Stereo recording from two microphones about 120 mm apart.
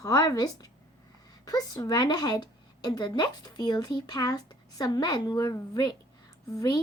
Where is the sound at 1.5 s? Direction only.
30° left (ahead or behind).